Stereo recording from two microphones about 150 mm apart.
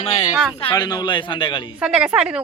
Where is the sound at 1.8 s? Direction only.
5° right (ahead or behind).